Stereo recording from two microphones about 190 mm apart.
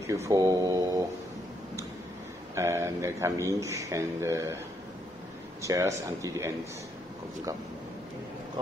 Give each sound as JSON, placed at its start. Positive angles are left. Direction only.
{"t": 0.0, "sound": "speech", "side_deg": -15}
{"t": 2.5, "sound": "speech", "side_deg": -15}
{"t": 5.6, "sound": "speech", "side_deg": -15}